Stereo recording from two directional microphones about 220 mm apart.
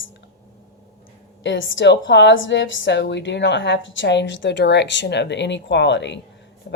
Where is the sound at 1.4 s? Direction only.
55° left (ahead or behind).